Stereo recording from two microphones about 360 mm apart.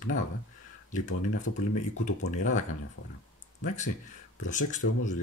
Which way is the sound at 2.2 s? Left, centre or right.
Left.